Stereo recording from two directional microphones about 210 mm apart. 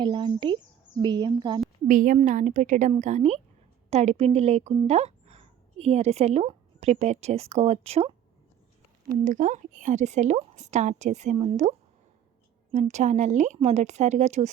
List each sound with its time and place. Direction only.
0.0 s speech: 25° right (ahead or behind)
1.9 s speech: 40° right (ahead or behind)
12.7 s speech: 35° right (ahead or behind)